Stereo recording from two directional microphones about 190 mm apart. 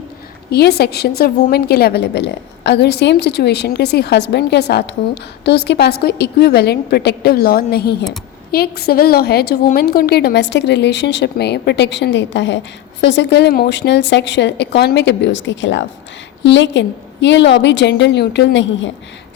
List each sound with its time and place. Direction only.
0.5 s a woman's voice: 60° left (ahead or behind)